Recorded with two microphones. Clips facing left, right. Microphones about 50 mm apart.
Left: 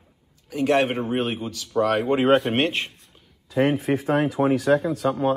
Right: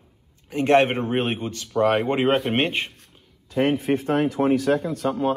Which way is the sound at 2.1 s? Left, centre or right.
Centre.